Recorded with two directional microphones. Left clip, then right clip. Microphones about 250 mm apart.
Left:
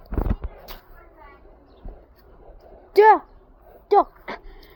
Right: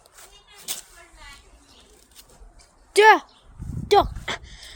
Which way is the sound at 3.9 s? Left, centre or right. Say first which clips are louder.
Even; right.